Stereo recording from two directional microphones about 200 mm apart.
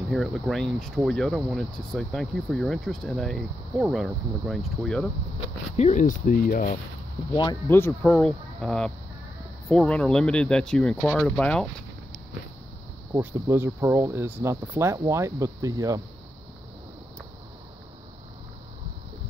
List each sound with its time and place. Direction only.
0.1 s speech: centre (ahead or behind)
5.8 s speech: 35° left (ahead or behind)
7.6 s speech: 10° left (ahead or behind)
13.1 s speech: 10° right (ahead or behind)